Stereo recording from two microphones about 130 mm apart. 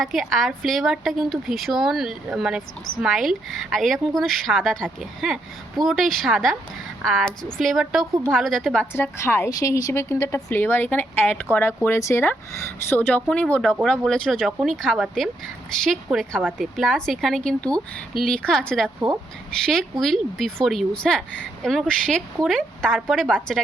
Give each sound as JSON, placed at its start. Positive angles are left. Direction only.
{"t": 0.0, "sound": "a woman's voice", "side_deg": 0}
{"t": 8.9, "sound": "a woman's voice", "side_deg": 20}
{"t": 16.0, "sound": "a woman's voice", "side_deg": 0}